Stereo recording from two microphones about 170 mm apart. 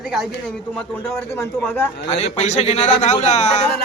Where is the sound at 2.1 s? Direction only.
40° left (ahead or behind).